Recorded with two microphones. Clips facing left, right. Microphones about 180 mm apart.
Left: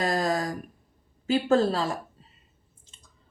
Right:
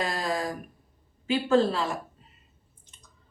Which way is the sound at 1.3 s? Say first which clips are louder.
Left 1 dB; 40° left (ahead or behind).